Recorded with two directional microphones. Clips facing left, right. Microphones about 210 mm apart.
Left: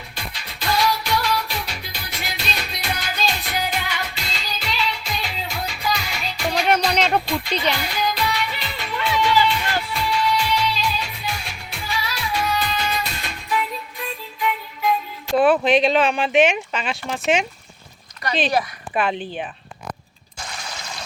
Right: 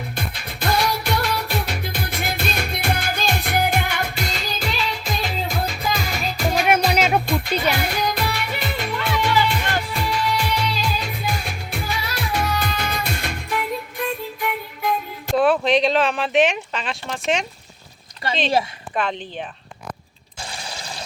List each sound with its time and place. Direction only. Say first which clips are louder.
0.2 s music: right 3 dB; 50° right (ahead or behind)
6.0 s music: right 5 dB; 40° right (ahead or behind)
6.5 s music: right 1 dB; 5° right (ahead or behind)
7.4 s music: right 2 dB; 45° right (ahead or behind)
15.4 s speech: left 1 dB; centre (ahead or behind)
18.9 s speech: left 2 dB; 5° left (ahead or behind)
20.5 s a sound: right 1 dB; 30° right (ahead or behind)